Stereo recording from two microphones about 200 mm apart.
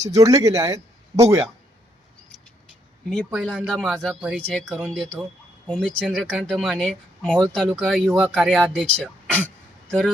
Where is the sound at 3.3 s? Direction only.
Centre (ahead or behind).